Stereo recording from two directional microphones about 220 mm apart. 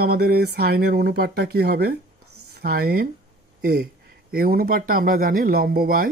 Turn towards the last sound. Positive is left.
turn(degrees=-45)  # may be behind; listen again after turning